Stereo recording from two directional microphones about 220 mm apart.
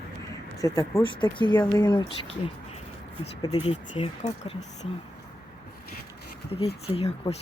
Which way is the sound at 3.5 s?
25° left (ahead or behind).